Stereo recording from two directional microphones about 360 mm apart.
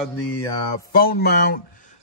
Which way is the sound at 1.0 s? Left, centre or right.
Left.